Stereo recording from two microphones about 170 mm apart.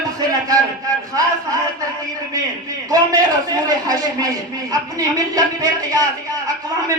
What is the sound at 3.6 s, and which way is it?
A woman's voice, 20° right (ahead or behind).